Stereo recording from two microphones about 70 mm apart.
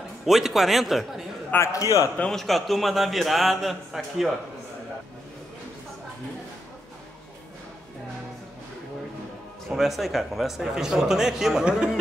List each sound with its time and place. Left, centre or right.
0.2 s a man's voice: centre
1.6 s a man's voice: left
2.3 s a man's voice: centre
9.7 s a man's voice: centre